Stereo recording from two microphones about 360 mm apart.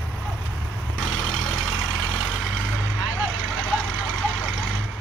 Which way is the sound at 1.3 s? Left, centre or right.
Right.